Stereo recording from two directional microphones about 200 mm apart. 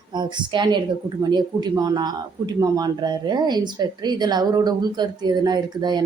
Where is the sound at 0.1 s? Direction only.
20° right (ahead or behind).